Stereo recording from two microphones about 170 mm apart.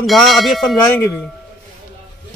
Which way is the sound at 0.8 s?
15° left (ahead or behind).